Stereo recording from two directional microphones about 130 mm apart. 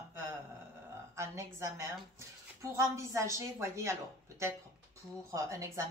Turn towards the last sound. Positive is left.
turn(degrees=-25)  # may be behind; listen again after turning